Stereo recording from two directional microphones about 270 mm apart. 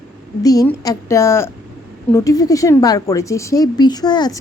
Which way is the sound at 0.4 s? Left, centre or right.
Centre.